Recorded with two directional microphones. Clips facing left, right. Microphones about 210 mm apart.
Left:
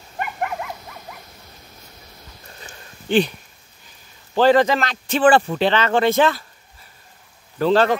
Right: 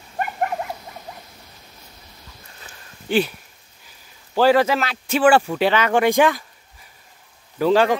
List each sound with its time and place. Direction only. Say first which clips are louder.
0.2 s dog: right 2 dB; 35° right (ahead or behind)
2.6 s a sound: left 1 dB; 5° right (ahead or behind)
4.4 s a man's voice: left 1 dB; 5° right (ahead or behind)
7.5 s a man's voice: even; 10° right (ahead or behind)